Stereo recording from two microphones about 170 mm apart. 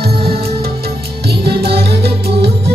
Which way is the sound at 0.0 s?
65° right (ahead or behind).